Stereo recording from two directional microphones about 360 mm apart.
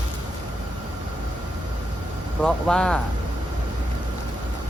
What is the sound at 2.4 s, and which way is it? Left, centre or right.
Speech, centre.